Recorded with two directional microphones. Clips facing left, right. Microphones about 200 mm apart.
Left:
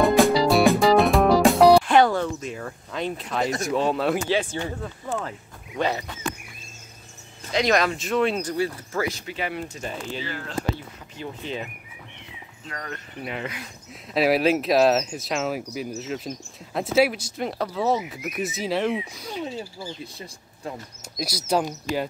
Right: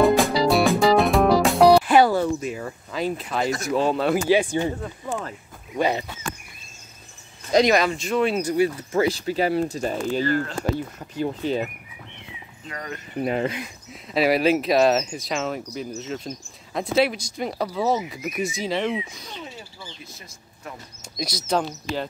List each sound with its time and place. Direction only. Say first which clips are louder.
0.0 s music: even; centre (ahead or behind)
3.6 s speech: right 2 dB; centre (ahead or behind)
4.3 s speech: right 5 dB; 15° right (ahead or behind)
7.7 s speech: right 1 dB; centre (ahead or behind); by 9.0 s 15° right (ahead or behind)
9.0 s speech: right 8 dB; 35° right (ahead or behind)
10.2 s speech: right 8 dB; centre (ahead or behind)
11.0 s speech: right 8 dB; 40° right (ahead or behind)
12.6 s speech: right 2 dB; 5° right (ahead or behind)
13.2 s speech: right 9 dB; 40° right (ahead or behind)
14.0 s speech: right 1 dB; centre (ahead or behind)
19.4 s speech: left 7 dB; 30° left (ahead or behind)
21.0 s speech: right 2 dB; 5° left (ahead or behind)